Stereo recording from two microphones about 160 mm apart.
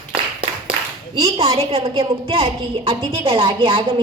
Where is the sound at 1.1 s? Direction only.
35° right (ahead or behind).